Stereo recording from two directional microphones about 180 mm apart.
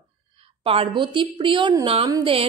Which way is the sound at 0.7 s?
30° right (ahead or behind).